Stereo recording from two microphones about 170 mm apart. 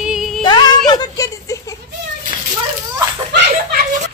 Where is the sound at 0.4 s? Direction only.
25° left (ahead or behind).